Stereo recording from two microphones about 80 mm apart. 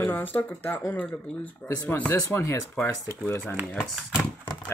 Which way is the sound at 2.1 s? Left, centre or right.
Left.